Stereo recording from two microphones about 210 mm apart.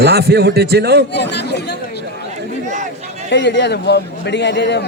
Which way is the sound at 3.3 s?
55° left (ahead or behind).